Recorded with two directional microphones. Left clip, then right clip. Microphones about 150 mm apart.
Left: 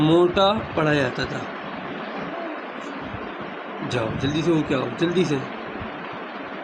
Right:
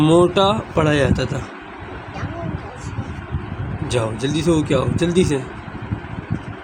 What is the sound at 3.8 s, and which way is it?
Speech, 60° right (ahead or behind).